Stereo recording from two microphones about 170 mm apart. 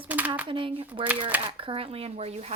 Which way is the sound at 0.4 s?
30° right (ahead or behind).